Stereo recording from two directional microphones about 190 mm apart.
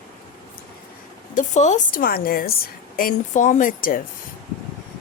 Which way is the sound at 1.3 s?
40° left (ahead or behind).